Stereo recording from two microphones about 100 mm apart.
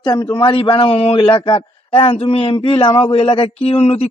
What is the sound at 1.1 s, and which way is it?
A man's voice, 55° left (ahead or behind).